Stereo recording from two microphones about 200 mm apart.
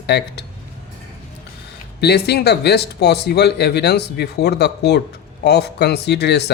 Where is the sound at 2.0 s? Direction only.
55° left (ahead or behind).